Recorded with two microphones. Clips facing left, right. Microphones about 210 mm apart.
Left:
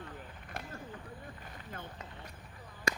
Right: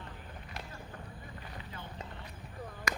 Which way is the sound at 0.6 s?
50° left (ahead or behind).